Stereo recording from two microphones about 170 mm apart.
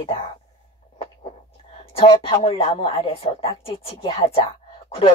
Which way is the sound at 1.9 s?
35° left (ahead or behind).